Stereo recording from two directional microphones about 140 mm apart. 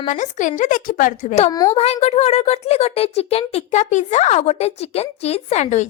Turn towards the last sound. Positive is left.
turn(degrees=55)  # may be behind; listen again after turning